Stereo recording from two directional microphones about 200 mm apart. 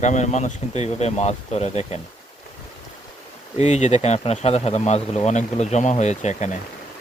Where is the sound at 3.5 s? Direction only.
35° left (ahead or behind).